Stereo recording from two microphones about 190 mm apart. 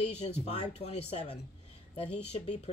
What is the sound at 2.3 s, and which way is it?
Speech, 35° left (ahead or behind).